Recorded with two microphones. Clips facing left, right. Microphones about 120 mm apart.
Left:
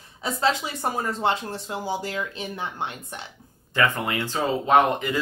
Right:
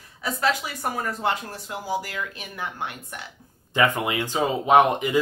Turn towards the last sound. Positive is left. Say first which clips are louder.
# right 2 dB
turn(degrees=-15)  # may be behind; listen again after turning